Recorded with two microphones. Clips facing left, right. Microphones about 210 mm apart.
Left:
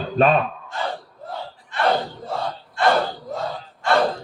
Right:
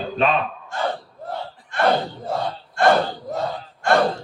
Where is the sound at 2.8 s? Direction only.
50° right (ahead or behind).